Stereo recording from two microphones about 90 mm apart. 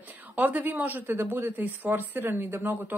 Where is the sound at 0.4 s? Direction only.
20° right (ahead or behind).